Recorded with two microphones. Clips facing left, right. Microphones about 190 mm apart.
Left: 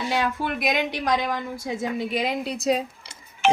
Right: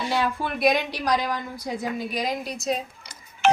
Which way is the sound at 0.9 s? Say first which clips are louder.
Left 1 dB; 20° left (ahead or behind).